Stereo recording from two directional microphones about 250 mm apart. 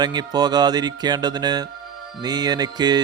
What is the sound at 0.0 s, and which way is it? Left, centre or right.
Speech, centre.